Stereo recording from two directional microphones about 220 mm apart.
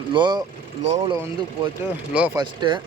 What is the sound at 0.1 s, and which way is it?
Speech, 20° right (ahead or behind).